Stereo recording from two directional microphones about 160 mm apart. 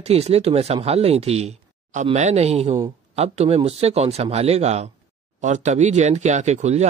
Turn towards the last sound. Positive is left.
turn(degrees=-45)  # may be behind; listen again after turning